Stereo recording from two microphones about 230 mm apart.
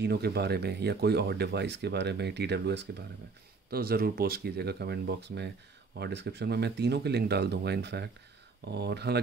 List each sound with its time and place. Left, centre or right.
0.0 s speech: right